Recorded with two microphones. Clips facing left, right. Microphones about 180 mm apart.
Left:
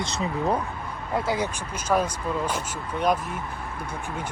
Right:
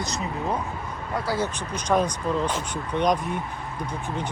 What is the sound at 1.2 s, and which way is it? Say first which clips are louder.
Speech: left 1 dB; 20° left (ahead or behind).